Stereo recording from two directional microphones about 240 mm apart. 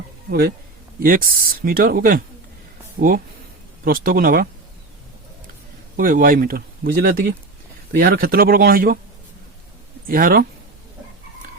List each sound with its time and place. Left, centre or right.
0.3 s speech: right
3.8 s speech: right
6.0 s speech: right
10.1 s speech: right